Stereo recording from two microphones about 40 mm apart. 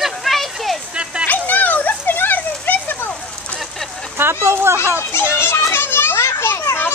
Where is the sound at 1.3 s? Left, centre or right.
Left.